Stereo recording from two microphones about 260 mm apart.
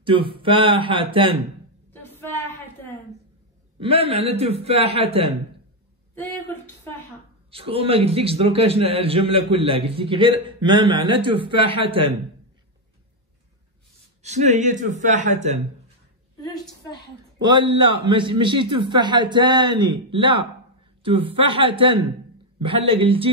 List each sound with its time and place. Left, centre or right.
0.0 s a man's voice: centre
1.9 s a sound: centre
3.8 s a man's voice: right
7.5 s a man's voice: right
14.2 s a man's voice: right
17.4 s a man's voice: centre